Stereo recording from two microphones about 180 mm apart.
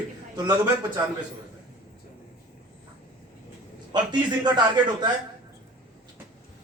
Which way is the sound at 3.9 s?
25° right (ahead or behind).